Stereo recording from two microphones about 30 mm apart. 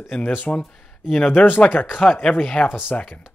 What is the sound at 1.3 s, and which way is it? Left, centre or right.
Speech, left.